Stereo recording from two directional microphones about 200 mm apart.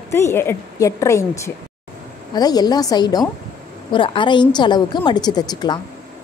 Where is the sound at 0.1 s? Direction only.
10° left (ahead or behind).